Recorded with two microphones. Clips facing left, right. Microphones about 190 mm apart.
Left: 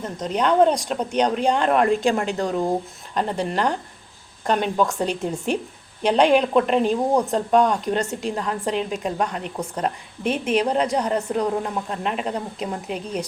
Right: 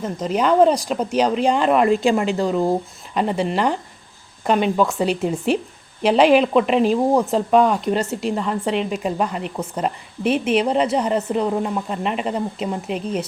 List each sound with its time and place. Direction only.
0.0 s speech: 5° right (ahead or behind)